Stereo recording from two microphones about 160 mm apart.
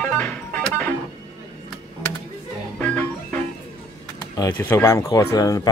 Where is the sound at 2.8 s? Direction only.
10° left (ahead or behind).